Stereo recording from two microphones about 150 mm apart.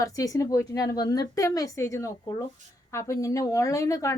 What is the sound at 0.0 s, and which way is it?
Speech, 20° left (ahead or behind).